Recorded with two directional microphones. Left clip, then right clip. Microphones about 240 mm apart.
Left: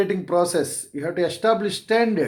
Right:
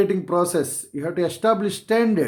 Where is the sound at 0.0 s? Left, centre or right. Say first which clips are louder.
Even; right.